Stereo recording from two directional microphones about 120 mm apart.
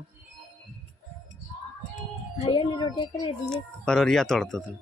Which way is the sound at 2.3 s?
55° left (ahead or behind).